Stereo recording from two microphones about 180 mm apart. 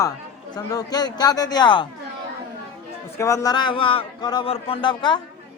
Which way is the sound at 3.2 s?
15° left (ahead or behind).